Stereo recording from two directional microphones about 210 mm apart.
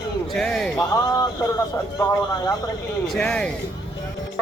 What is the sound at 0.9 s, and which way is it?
Speech, 20° left (ahead or behind).